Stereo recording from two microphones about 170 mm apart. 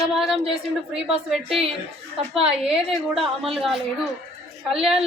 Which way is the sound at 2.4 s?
35° right (ahead or behind).